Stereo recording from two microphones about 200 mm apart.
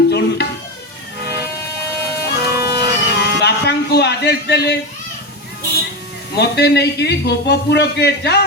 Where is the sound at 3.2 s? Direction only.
55° left (ahead or behind).